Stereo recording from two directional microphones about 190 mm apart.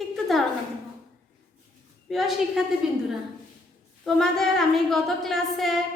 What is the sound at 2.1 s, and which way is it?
Speech, centre (ahead or behind).